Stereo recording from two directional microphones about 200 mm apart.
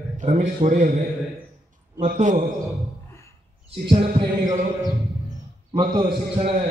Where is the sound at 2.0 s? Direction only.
40° right (ahead or behind).